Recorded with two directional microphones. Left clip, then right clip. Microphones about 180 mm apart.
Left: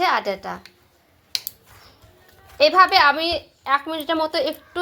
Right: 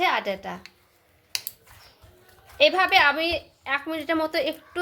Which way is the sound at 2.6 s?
25° left (ahead or behind).